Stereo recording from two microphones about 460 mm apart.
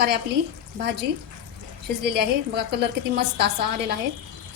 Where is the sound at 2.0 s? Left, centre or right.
Right.